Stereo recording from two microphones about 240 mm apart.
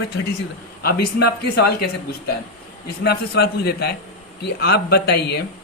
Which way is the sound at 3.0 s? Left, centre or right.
Left.